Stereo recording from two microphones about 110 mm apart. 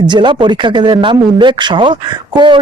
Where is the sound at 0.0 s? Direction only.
45° right (ahead or behind).